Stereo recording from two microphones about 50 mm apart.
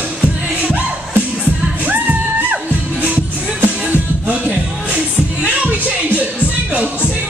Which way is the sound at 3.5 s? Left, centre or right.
Right.